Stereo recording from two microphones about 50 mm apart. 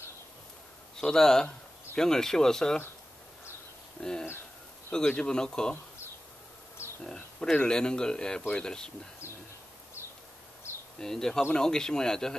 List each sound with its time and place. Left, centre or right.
1.0 s speech: centre
4.0 s speech: centre
4.9 s speech: left
7.0 s speech: centre
11.0 s speech: centre